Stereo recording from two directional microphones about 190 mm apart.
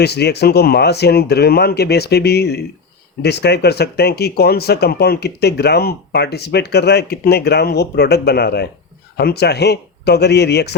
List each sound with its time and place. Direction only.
0.0 s speech: 60° left (ahead or behind)